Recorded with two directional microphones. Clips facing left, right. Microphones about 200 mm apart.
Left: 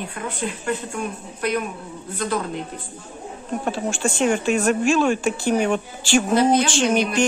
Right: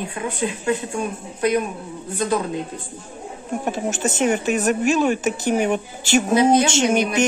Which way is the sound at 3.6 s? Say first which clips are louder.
Right 1 dB; 20° right (ahead or behind).